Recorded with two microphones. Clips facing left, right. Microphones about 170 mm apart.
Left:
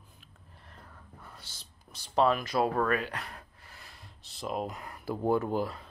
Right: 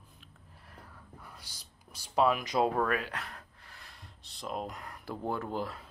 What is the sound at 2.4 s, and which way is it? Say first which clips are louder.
Speech: even; 15° right (ahead or behind).